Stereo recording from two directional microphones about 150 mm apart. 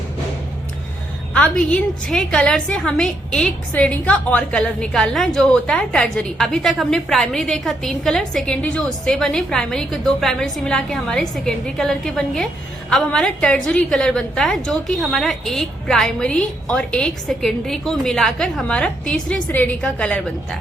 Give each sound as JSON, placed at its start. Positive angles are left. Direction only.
{"t": 1.3, "sound": "a woman's voice", "side_deg": 5}